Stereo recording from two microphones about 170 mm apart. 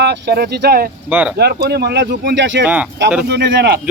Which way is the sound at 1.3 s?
65° right (ahead or behind).